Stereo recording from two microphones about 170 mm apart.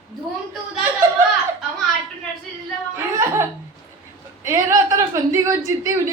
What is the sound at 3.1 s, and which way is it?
Laughter, 15° right (ahead or behind).